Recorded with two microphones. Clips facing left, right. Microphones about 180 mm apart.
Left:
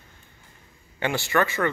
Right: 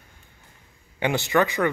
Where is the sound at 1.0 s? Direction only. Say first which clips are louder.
Right 2 dB; 15° right (ahead or behind).